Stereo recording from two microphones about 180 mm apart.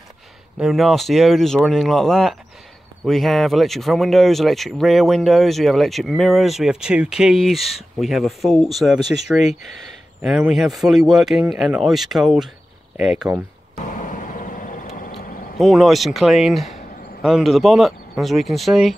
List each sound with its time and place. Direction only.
0.6 s speech: centre (ahead or behind)
13.7 s a sound: 45° left (ahead or behind)
15.6 s speech: centre (ahead or behind)